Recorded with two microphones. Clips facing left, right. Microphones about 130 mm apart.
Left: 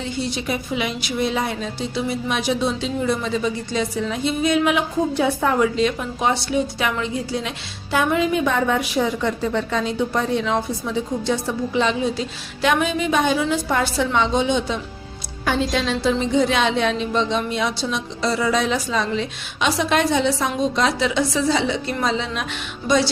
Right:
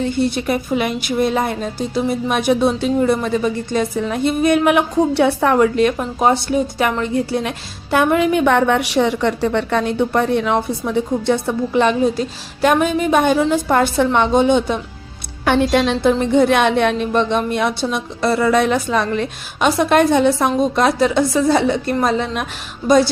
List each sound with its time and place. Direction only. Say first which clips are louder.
0.0 s a woman's voice: right 7 dB; 55° right (ahead or behind)